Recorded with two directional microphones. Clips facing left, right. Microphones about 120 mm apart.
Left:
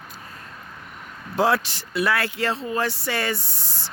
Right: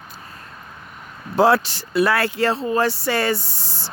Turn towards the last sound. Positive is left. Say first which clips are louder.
# right 3 dB
turn(degrees=-35)  # may be behind; listen again after turning